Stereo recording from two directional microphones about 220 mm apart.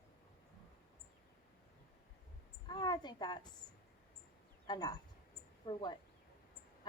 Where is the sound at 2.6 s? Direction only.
20° left (ahead or behind).